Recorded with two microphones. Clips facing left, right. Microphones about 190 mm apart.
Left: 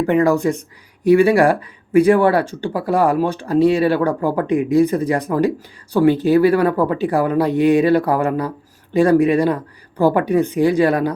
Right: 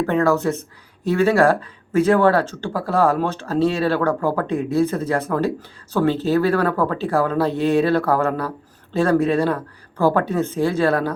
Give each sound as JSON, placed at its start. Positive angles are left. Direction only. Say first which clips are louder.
{"t": 0.0, "sound": "speech", "louder": "left 3 dB", "side_deg": 15}